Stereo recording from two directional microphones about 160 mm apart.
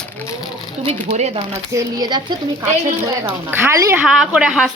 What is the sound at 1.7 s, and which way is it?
Speech, 25° right (ahead or behind).